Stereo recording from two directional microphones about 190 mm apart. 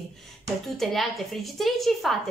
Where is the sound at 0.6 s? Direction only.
Centre (ahead or behind).